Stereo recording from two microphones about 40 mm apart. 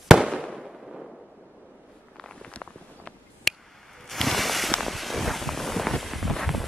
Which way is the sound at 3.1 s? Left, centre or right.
Left.